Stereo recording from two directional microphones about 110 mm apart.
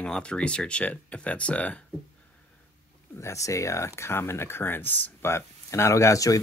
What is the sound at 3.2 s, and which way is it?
Speech, 25° left (ahead or behind).